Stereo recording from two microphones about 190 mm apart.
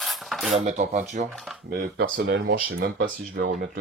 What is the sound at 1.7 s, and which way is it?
Speech, 50° right (ahead or behind).